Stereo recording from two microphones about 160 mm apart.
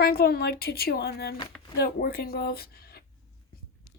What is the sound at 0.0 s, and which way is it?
Speech, 70° left (ahead or behind).